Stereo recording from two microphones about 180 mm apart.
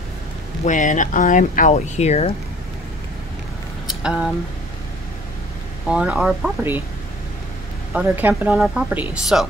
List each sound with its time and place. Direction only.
0.7 s speech: 45° left (ahead or behind)
4.0 s speech: 5° right (ahead or behind)
5.9 s speech: 5° right (ahead or behind)
7.9 s speech: 10° right (ahead or behind)